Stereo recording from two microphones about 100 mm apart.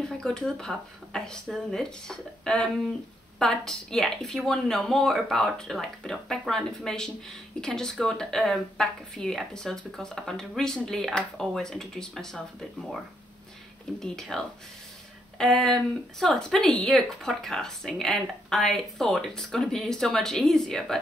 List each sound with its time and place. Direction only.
0.0 s speech: 5° left (ahead or behind)
13.9 s speech: 5° left (ahead or behind)